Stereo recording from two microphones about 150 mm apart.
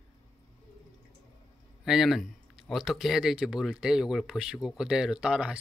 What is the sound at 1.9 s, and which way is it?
Speech, centre (ahead or behind).